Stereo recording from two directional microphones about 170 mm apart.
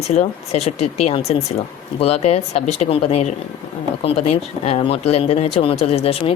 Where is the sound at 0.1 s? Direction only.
40° left (ahead or behind).